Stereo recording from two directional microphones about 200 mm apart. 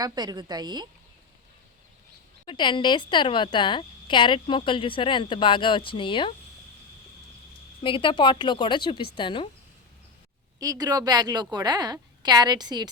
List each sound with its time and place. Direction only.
0.0 s a woman's voice: 20° right (ahead or behind)
2.5 s a woman's voice: 25° left (ahead or behind)
7.8 s a woman's voice: 25° left (ahead or behind)
10.6 s a woman's voice: 20° right (ahead or behind)